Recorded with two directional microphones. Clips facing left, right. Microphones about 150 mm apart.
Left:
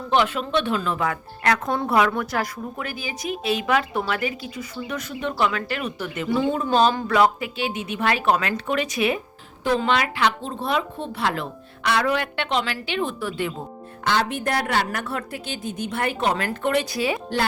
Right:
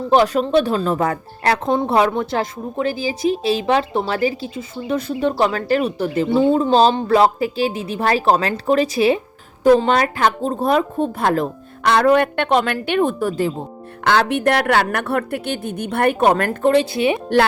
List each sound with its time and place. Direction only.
0.1 s a woman's voice: 40° right (ahead or behind)
14.0 s a woman's voice: 65° right (ahead or behind)
16.6 s speech: 30° right (ahead or behind)